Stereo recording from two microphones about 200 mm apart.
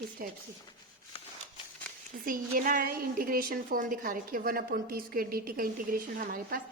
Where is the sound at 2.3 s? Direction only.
45° right (ahead or behind).